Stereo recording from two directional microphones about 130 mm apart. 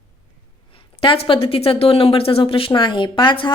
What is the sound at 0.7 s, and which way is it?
Speech, 45° left (ahead or behind).